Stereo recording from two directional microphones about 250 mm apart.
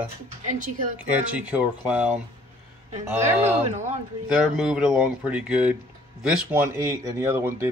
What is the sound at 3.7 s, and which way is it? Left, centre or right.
Speech, right.